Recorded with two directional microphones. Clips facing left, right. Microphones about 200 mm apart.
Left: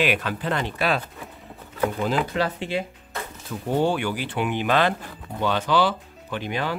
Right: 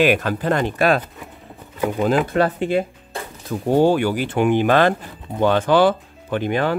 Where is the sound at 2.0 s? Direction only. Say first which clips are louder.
Right 9 dB; 50° right (ahead or behind).